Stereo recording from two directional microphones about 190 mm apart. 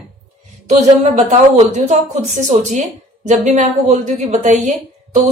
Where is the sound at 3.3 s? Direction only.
40° right (ahead or behind).